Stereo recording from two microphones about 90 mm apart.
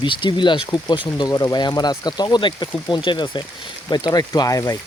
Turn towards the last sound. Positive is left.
turn(degrees=40)  # may be behind; listen again after turning